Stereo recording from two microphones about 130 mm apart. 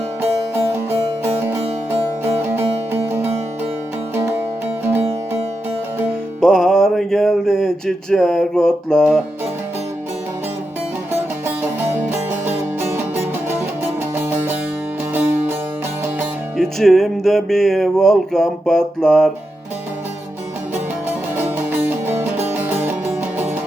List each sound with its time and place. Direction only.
0.2 s music: 15° right (ahead or behind)
6.4 s music: 5° left (ahead or behind)
11.1 s music: 15° right (ahead or behind)
16.6 s music: centre (ahead or behind)
21.3 s music: 15° right (ahead or behind)